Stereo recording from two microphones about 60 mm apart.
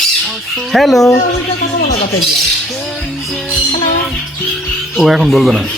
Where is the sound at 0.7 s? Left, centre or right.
Centre.